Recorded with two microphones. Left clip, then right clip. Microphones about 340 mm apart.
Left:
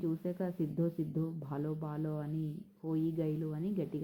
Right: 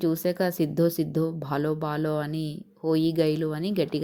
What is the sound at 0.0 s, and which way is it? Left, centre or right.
Speech, centre.